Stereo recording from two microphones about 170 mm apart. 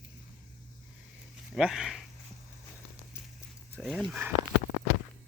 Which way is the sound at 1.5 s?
5° right (ahead or behind).